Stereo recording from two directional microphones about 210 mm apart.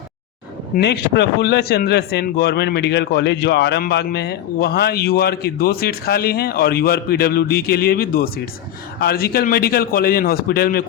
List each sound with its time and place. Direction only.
0.8 s speech: 55° left (ahead or behind)